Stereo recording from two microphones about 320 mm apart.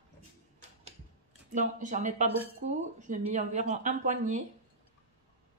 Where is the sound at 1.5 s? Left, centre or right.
Right.